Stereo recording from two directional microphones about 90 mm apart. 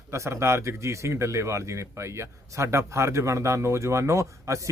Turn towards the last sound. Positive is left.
turn(degrees=-35)  # may be behind; listen again after turning